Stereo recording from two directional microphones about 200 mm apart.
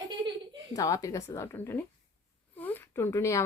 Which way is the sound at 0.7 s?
15° left (ahead or behind).